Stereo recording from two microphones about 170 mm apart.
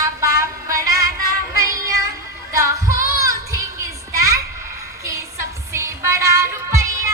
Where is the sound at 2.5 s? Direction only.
20° right (ahead or behind).